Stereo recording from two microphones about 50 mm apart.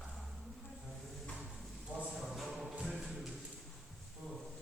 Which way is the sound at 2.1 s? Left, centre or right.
Centre.